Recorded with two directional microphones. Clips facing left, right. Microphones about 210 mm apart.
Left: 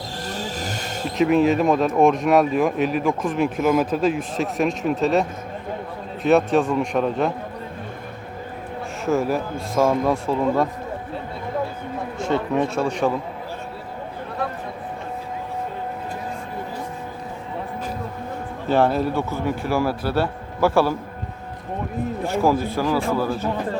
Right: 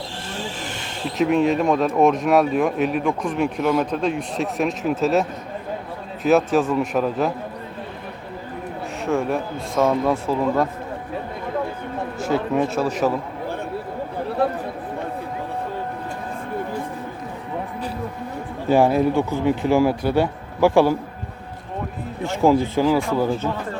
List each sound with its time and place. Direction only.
0.3 s vehicle: 40° left (ahead or behind)
1.2 s speech: centre (ahead or behind)
6.2 s speech: centre (ahead or behind)
9.0 s speech: centre (ahead or behind)
12.2 s speech: 5° right (ahead or behind)
18.7 s speech: 10° right (ahead or behind)
22.4 s speech: 20° right (ahead or behind)